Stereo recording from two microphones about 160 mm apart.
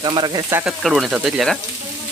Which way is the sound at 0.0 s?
25° right (ahead or behind).